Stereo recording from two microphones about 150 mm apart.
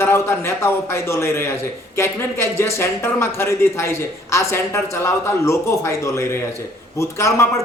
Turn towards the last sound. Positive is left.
turn(degrees=20)  # may be behind; listen again after turning